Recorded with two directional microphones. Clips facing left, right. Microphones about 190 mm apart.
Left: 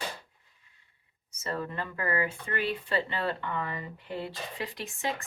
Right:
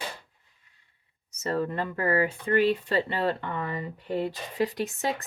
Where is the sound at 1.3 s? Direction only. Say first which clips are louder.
Right 6 dB; 40° right (ahead or behind).